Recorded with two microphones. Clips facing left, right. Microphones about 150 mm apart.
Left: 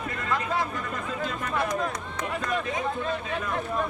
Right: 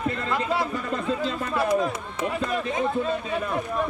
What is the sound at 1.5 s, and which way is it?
Speech, 5° right (ahead or behind).